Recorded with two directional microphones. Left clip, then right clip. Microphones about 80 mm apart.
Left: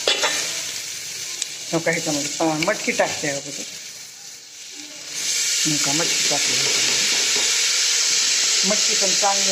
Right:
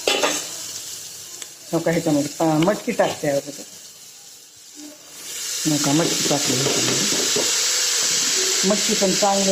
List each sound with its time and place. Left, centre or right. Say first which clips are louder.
0.0 s stir: even; right
1.7 s speech: right 2 dB; centre
5.6 s speech: right 6 dB; right